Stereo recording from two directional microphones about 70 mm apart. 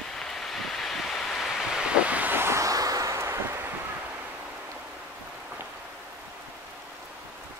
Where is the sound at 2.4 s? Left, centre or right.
Right.